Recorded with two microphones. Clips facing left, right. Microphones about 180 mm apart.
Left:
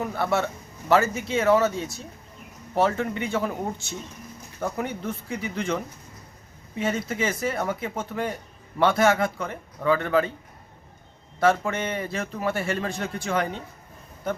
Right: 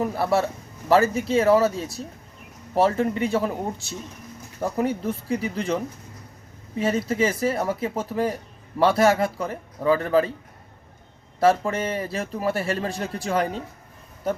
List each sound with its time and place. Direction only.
0.0 s a man's voice: 35° right (ahead or behind)
4.8 s a man's voice: 35° right (ahead or behind)
6.7 s a man's voice: 35° right (ahead or behind)
11.3 s a man's voice: 35° right (ahead or behind)